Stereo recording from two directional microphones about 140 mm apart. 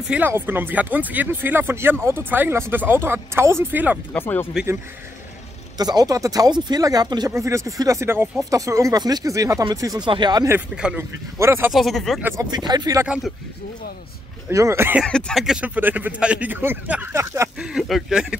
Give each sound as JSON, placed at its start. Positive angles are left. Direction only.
{"t": 0.1, "sound": "a man's voice", "side_deg": -15}
{"t": 4.1, "sound": "speech", "side_deg": 15}
{"t": 5.8, "sound": "speech", "side_deg": -30}
{"t": 11.0, "sound": "a man's voice", "side_deg": -20}
{"t": 11.7, "sound": "speech", "side_deg": 0}
{"t": 12.4, "sound": "speech", "side_deg": -30}
{"t": 13.0, "sound": "a man's voice", "side_deg": -10}
{"t": 14.5, "sound": "speech", "side_deg": -20}
{"t": 15.0, "sound": "a man's voice", "side_deg": 5}
{"t": 17.6, "sound": "speech", "side_deg": -5}